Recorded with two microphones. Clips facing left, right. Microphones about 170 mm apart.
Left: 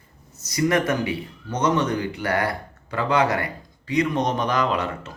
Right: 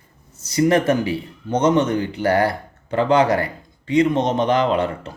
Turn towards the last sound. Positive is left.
turn(degrees=-30)  # may be behind; listen again after turning